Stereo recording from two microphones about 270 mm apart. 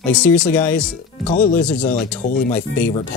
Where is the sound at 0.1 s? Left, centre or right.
Centre.